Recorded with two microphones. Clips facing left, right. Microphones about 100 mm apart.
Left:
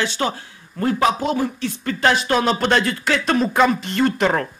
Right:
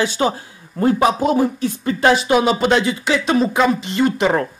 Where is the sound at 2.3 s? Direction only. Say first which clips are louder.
Right 3 dB; 10° right (ahead or behind).